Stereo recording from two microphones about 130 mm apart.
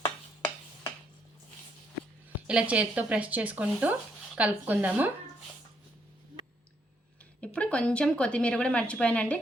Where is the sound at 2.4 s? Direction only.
10° right (ahead or behind).